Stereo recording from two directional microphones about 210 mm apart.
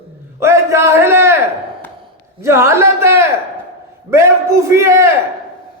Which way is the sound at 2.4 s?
10° right (ahead or behind).